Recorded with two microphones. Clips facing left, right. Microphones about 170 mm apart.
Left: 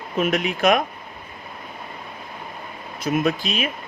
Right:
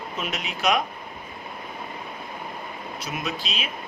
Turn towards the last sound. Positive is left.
turn(degrees=50)  # may be behind; listen again after turning